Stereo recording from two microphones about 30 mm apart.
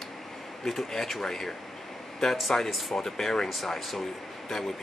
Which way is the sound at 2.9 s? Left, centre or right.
Centre.